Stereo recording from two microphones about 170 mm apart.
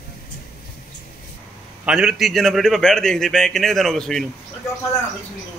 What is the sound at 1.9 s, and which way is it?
A man's voice, 5° right (ahead or behind).